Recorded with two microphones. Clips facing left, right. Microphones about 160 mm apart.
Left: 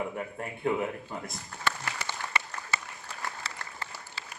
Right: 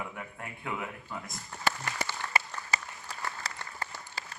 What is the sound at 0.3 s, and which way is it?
Speech, 35° left (ahead or behind).